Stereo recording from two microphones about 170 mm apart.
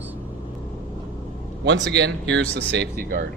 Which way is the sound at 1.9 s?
90° right.